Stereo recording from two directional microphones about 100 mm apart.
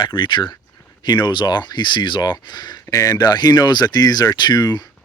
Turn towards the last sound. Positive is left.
turn(degrees=40)  # may be behind; listen again after turning